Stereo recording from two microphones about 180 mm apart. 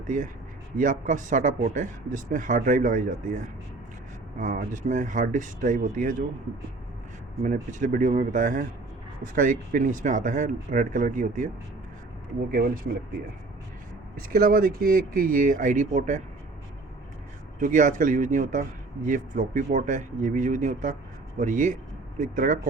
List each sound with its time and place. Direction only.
0.8 s speech: 45° right (ahead or behind)
7.4 s speech: 45° right (ahead or behind)
14.2 s speech: 55° right (ahead or behind)
17.6 s speech: 45° right (ahead or behind)